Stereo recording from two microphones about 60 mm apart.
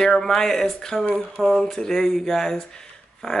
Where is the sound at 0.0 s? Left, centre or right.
Centre.